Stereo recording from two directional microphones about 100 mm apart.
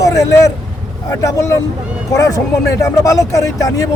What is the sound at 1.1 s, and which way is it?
Speech, 35° left (ahead or behind).